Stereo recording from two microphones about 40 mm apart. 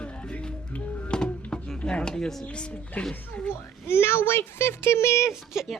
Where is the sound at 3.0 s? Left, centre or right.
Left.